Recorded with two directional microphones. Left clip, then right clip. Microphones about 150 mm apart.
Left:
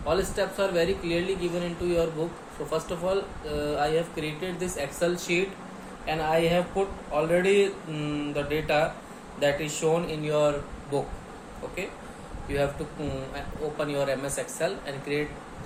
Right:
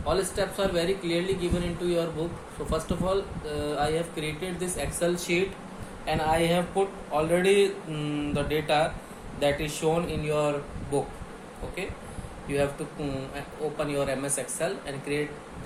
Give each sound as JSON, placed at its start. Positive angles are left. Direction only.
{"t": 0.0, "sound": "speech", "side_deg": -40}
{"t": 12.5, "sound": "speech", "side_deg": -45}